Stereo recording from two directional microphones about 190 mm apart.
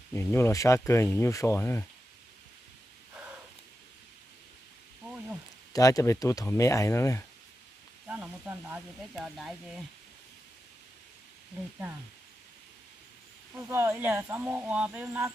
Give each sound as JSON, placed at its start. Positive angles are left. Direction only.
{"t": 0.1, "sound": "speech", "side_deg": 15}
{"t": 5.7, "sound": "speech", "side_deg": 20}
{"t": 8.0, "sound": "speech", "side_deg": -10}
{"t": 13.6, "sound": "speech", "side_deg": -10}